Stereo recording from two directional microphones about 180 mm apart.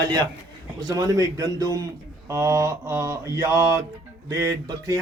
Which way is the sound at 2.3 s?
20° right (ahead or behind).